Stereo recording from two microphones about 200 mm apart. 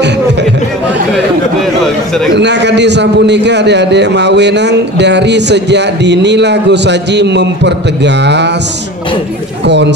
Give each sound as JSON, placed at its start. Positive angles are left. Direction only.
{"t": 2.3, "sound": "a man's voice", "side_deg": -60}
{"t": 9.7, "sound": "a man's voice", "side_deg": -60}